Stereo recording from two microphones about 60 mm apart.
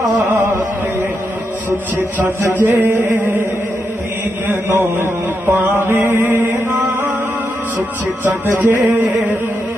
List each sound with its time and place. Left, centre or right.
0.2 s chant: right
2.5 s speech: right
4.5 s mantra: right
5.5 s mantra: right
8.2 s speech: right